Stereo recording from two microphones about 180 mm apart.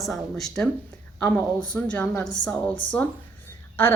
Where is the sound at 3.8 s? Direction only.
10° left (ahead or behind).